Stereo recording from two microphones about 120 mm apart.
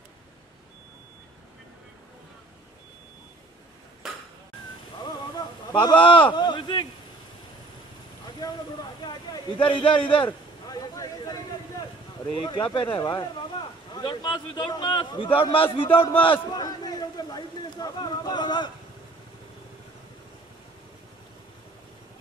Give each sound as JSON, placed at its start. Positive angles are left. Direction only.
{"t": 4.0, "sound": "dishes", "side_deg": 0}
{"t": 5.8, "sound": "speech", "side_deg": 45}
{"t": 8.4, "sound": "a sound", "side_deg": 30}
{"t": 9.0, "sound": "speech", "side_deg": 40}
{"t": 10.7, "sound": "a sound", "side_deg": 30}
{"t": 12.4, "sound": "a man's voice", "side_deg": 45}
{"t": 16.6, "sound": "a man's voice", "side_deg": 35}